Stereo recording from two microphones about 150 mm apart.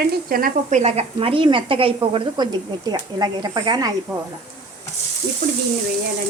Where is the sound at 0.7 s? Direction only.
45° right (ahead or behind); by 3.9 s 25° right (ahead or behind).